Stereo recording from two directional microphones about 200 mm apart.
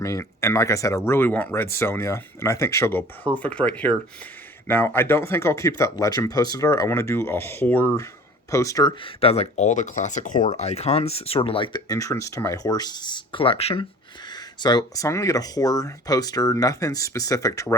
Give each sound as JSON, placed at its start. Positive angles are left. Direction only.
{"t": 0.0, "sound": "speech", "side_deg": 15}